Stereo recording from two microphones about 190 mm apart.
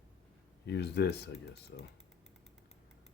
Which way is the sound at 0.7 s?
60° left (ahead or behind).